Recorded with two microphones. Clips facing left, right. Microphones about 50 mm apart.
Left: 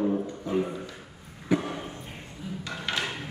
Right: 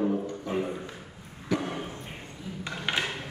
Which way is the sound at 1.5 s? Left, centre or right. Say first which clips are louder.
Left 3 dB; centre.